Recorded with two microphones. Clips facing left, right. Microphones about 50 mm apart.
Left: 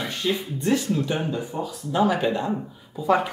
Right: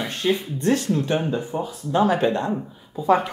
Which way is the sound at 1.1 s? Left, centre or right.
Right.